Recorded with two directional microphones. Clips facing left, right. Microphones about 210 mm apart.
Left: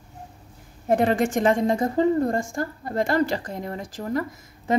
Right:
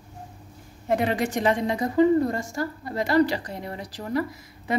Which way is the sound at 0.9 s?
50° left (ahead or behind).